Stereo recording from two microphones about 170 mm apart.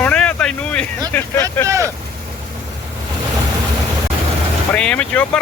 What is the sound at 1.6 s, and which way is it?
Vehicle, 20° right (ahead or behind).